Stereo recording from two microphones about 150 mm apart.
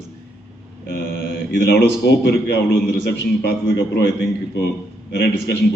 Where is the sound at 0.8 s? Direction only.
90° left.